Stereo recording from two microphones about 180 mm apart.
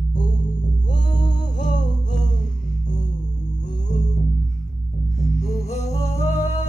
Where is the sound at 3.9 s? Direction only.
45° left (ahead or behind).